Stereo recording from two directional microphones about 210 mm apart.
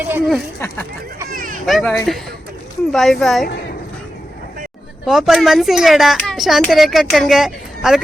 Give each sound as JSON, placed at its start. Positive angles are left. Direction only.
{"t": 0.0, "sound": "speech", "side_deg": -5}
{"t": 1.3, "sound": "a sound", "side_deg": -40}
{"t": 1.6, "sound": "speech", "side_deg": 0}
{"t": 5.0, "sound": "speech", "side_deg": 0}